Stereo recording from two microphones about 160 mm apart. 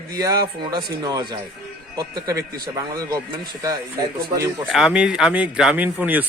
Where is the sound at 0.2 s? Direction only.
25° right (ahead or behind).